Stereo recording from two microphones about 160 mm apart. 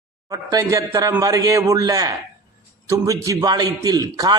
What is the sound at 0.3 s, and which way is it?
A man's voice, 20° right (ahead or behind).